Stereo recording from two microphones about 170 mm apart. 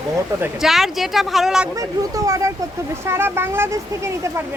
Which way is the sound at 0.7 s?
Centre (ahead or behind).